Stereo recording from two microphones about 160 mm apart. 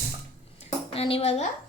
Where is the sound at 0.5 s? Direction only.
40° left (ahead or behind).